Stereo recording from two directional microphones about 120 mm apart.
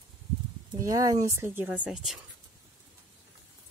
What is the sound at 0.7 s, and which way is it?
Speech, 25° right (ahead or behind).